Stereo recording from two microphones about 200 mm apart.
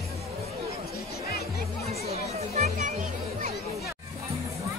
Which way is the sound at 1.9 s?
30° right (ahead or behind).